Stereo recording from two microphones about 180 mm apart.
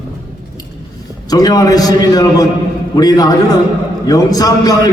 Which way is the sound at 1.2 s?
20° left (ahead or behind).